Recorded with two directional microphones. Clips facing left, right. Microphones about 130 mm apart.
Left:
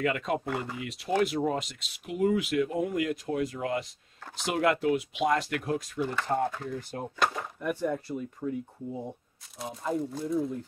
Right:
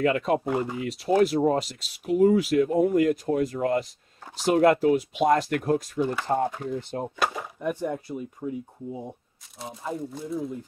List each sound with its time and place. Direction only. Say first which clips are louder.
0.0 s speech: right 6 dB; 40° right (ahead or behind)
5.9 s speech: right 4 dB; 15° right (ahead or behind)
7.2 s speech: left 1 dB; 5° right (ahead or behind)
7.6 s speech: right 1 dB; 20° right (ahead or behind)
9.6 s speech: left 2 dB; centre (ahead or behind)